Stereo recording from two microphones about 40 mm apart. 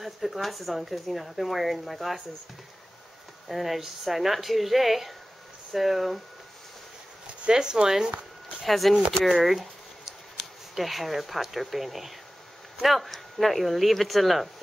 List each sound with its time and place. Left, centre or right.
0.0 s speech: centre
3.4 s speech: centre
7.4 s speech: centre
8.6 s speech: centre